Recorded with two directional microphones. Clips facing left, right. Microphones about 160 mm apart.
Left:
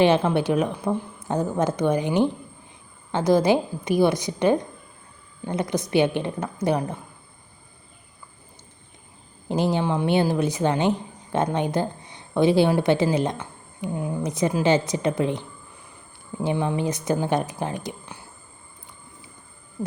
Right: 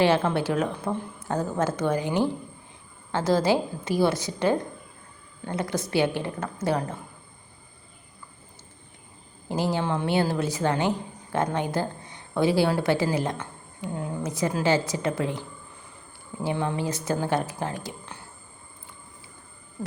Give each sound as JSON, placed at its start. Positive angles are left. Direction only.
{"t": 0.0, "sound": "speech", "side_deg": 15}
{"t": 9.5, "sound": "a woman's voice", "side_deg": 20}